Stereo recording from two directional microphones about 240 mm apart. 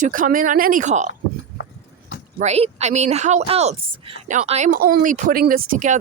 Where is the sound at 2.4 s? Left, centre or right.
Right.